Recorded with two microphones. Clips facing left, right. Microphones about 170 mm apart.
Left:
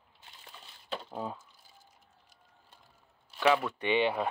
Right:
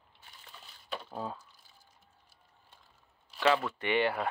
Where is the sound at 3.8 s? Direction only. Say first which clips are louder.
Left 1 dB; 20° left (ahead or behind).